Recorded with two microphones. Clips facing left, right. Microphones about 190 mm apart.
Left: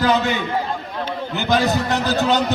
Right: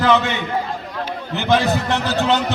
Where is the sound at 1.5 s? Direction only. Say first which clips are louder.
Right 1 dB; 40° left (ahead or behind).